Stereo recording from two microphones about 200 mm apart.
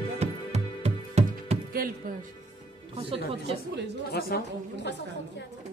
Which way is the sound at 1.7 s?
45° right (ahead or behind).